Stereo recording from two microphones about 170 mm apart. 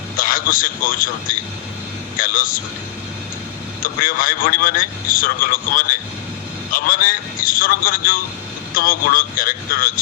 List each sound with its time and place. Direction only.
0.2 s a man's voice: 55° left (ahead or behind)
3.8 s a man's voice: 55° left (ahead or behind)